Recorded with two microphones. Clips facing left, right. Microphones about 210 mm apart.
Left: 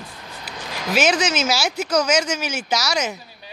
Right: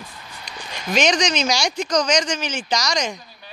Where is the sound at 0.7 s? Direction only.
90° left.